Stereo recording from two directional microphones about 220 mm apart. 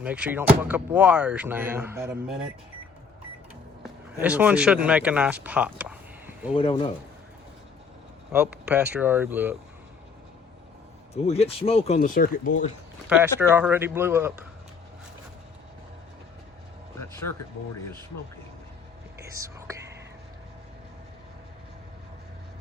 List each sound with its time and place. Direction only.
0.0 s speech: 5° right (ahead or behind)
4.2 s speech: 5° right (ahead or behind)
6.6 s speech: 25° left (ahead or behind)
8.3 s speech: 5° right (ahead or behind)
11.1 s speech: 30° left (ahead or behind)
13.1 s speech: 10° right (ahead or behind)
19.2 s whispering: 15° right (ahead or behind)